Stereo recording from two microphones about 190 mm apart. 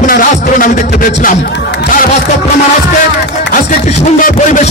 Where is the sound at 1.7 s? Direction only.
65° left (ahead or behind).